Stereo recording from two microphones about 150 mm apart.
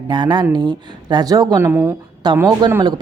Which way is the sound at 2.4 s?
25° right (ahead or behind).